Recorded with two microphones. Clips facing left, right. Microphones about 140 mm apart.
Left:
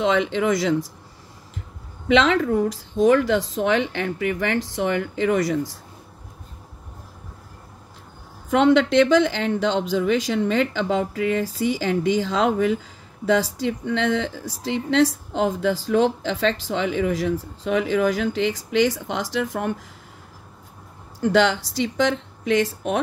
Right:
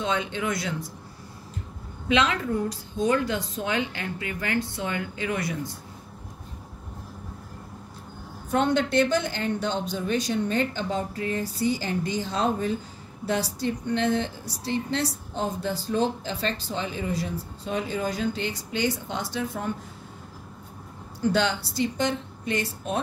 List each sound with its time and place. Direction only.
0.0 s speech: 90° left
2.0 s speech: 90° left
8.5 s speech: 90° left
21.2 s speech: 90° left